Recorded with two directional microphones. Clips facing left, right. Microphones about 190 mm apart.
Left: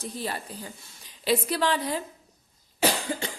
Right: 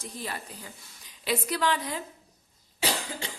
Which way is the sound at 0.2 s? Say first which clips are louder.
Left 3 dB; 30° left (ahead or behind).